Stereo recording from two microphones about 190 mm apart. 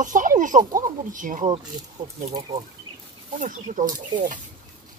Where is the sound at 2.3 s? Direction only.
25° right (ahead or behind).